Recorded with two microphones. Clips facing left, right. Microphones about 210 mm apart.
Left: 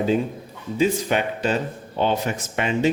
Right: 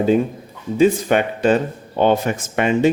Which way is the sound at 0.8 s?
50° right (ahead or behind).